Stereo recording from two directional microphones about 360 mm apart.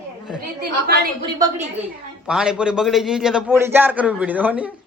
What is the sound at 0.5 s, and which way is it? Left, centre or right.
Speech, right.